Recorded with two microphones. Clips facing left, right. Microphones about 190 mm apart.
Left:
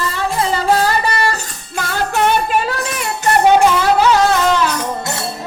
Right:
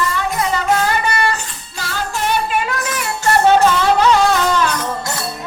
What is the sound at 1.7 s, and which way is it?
Music, 60° left (ahead or behind).